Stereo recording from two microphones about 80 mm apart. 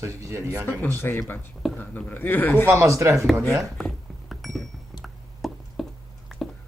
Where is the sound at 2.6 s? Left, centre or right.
Right.